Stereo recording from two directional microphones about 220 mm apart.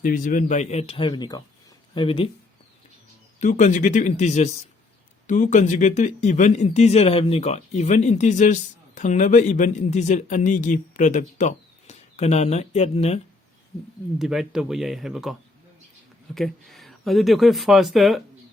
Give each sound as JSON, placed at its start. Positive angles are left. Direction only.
{"t": 0.0, "sound": "speech", "side_deg": 35}
{"t": 3.4, "sound": "speech", "side_deg": 35}
{"t": 14.2, "sound": "speech", "side_deg": 0}